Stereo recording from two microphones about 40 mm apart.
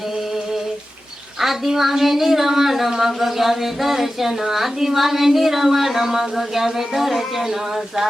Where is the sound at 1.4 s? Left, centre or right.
Centre.